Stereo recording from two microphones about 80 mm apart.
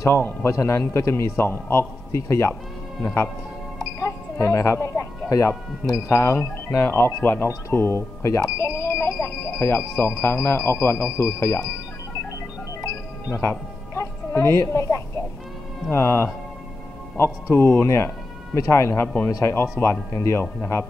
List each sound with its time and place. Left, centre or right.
0.0 s a man's voice: left
4.0 s a man's voice: left
12.8 s music: left
15.9 s a man's voice: left